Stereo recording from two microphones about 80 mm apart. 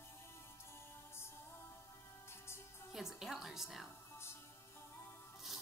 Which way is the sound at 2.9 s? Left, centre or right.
Centre.